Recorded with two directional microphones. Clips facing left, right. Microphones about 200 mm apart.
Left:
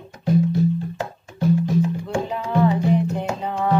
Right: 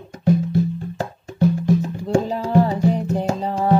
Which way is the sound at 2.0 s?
40° right (ahead or behind).